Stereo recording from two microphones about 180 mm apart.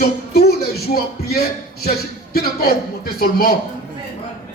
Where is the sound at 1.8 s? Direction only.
60° left (ahead or behind).